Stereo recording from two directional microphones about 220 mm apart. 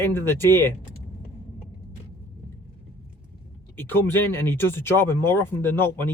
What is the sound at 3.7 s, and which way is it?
Speech, 10° left (ahead or behind).